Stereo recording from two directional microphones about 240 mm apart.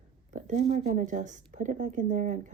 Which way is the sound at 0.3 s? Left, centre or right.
Right.